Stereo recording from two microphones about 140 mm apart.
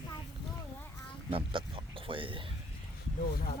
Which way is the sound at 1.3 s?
40° right (ahead or behind).